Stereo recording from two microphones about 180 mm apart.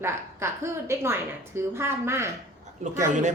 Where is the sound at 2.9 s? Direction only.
45° right (ahead or behind).